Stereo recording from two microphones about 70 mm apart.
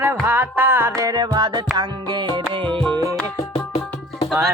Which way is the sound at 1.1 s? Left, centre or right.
Right.